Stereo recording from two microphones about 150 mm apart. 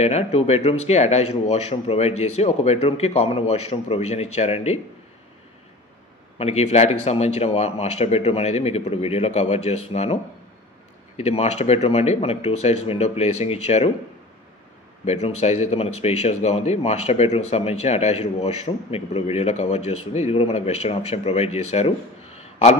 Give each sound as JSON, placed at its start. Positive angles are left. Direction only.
{"t": 0.0, "sound": "speech", "side_deg": 45}
{"t": 6.3, "sound": "speech", "side_deg": 45}
{"t": 11.1, "sound": "speech", "side_deg": 45}
{"t": 15.0, "sound": "speech", "side_deg": 45}